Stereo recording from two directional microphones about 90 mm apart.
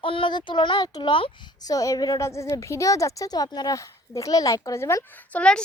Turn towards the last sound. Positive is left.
turn(degrees=10)  # may be behind; listen again after turning